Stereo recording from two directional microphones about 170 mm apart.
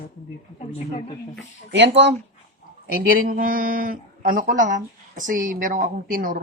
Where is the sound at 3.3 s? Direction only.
55° right (ahead or behind).